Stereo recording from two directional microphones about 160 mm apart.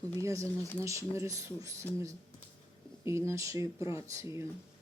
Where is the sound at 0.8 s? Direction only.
20° right (ahead or behind).